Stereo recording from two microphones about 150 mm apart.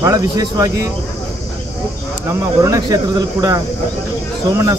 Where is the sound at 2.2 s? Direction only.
20° right (ahead or behind).